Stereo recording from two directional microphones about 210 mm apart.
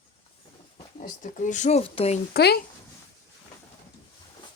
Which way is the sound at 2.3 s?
50° left (ahead or behind).